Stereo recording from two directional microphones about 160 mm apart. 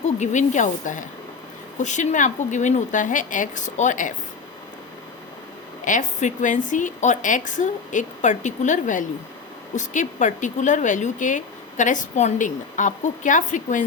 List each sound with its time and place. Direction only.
0.0 s speech: 45° left (ahead or behind)
5.8 s speech: 50° left (ahead or behind)